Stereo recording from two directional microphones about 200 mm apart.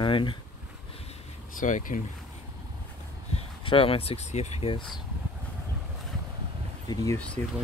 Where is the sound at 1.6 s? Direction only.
40° left (ahead or behind).